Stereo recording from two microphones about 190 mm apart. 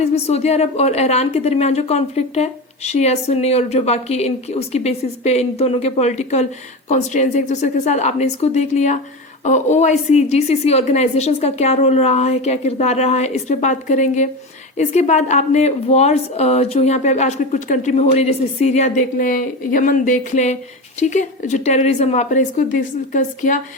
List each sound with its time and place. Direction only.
0.0 s a woman's voice: 35° left (ahead or behind)